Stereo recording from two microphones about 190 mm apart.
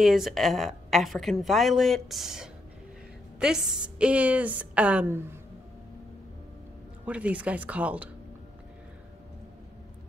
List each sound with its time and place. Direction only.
0.0 s a woman's voice: centre (ahead or behind)
7.1 s a woman's voice: 5° right (ahead or behind)